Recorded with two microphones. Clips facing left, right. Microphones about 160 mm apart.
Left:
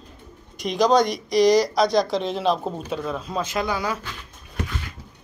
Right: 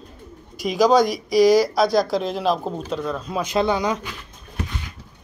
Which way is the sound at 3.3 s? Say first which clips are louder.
Right 6 dB; 15° right (ahead or behind).